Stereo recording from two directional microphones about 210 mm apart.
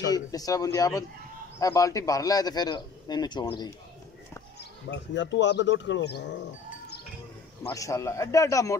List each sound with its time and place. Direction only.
0.1 s a man's voice: 15° left (ahead or behind)
4.6 s speech: 60° left (ahead or behind)
7.6 s a man's voice: 15° left (ahead or behind)